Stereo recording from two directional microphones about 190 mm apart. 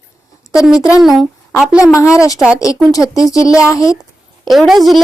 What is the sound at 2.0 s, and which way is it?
Speech, 15° left (ahead or behind).